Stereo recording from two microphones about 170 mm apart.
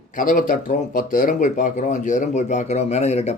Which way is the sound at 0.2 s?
50° left (ahead or behind).